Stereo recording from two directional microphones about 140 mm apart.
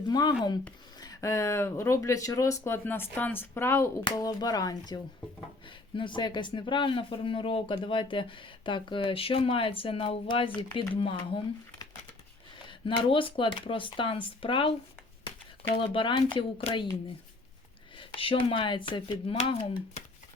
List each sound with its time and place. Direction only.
0.1 s speech: 30° left (ahead or behind)
15.8 s speech: 35° left (ahead or behind)
17.9 s speech: 40° left (ahead or behind)